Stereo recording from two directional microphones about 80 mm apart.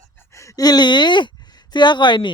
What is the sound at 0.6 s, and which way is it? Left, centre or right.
Speech, left.